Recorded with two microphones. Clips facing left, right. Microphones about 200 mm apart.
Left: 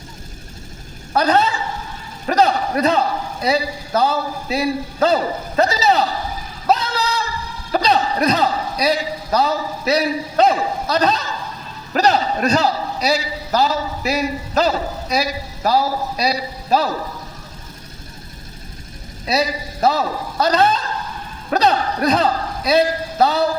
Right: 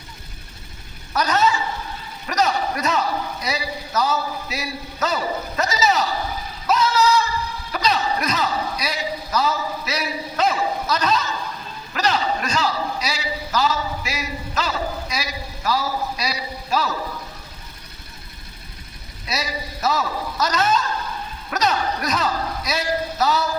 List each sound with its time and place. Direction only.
1.1 s a woman's voice: 30° left (ahead or behind)
6.7 s singing: 35° left (ahead or behind)
7.7 s a man's voice: 35° left (ahead or behind)
19.2 s a man's voice: 35° left (ahead or behind)